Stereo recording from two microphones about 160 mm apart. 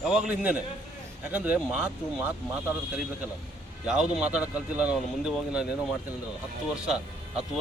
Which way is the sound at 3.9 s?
5° right (ahead or behind).